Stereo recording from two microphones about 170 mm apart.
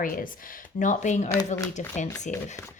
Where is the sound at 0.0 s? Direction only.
55° left (ahead or behind).